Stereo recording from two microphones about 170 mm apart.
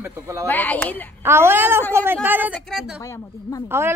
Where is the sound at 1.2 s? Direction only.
15° right (ahead or behind).